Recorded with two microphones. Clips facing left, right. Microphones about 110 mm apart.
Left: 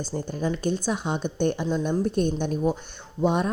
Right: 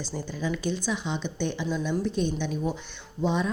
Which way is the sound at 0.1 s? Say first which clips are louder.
Left 3 dB; 45° left (ahead or behind).